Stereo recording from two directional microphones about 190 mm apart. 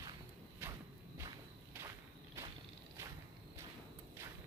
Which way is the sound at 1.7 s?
15° right (ahead or behind).